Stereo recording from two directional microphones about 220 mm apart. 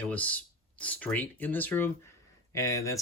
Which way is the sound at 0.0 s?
5° left (ahead or behind).